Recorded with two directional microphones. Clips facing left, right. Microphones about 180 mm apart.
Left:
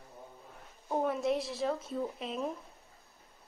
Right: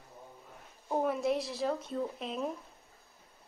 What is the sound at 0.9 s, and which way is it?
Speech, centre (ahead or behind).